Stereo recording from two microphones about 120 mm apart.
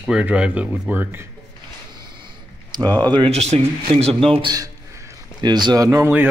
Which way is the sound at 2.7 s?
35° right (ahead or behind).